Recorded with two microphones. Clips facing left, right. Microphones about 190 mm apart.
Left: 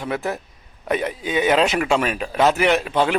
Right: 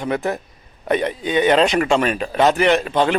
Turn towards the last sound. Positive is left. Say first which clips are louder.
# right 2 dB
turn(degrees=5)  # may be behind; listen again after turning